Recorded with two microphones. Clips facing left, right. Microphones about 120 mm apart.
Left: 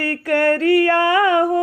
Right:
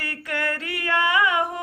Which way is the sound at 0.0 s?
40° left (ahead or behind).